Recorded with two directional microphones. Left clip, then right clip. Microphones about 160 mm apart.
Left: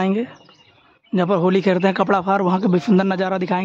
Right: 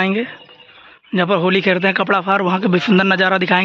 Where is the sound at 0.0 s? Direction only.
15° left (ahead or behind).